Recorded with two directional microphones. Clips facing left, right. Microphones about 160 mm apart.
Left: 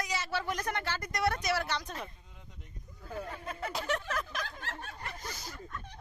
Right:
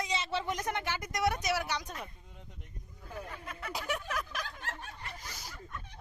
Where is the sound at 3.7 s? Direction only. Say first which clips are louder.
Left 1 dB; 10° right (ahead or behind).